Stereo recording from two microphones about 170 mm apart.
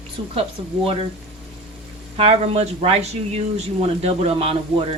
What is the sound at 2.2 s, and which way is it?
Speech, 35° right (ahead or behind).